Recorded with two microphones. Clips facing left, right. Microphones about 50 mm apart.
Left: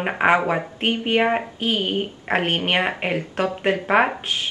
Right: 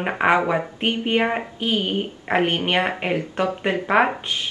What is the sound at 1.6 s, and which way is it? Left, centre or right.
Speech, left.